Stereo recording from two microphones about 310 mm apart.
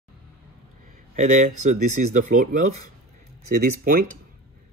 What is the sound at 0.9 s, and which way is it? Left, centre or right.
Speech, right.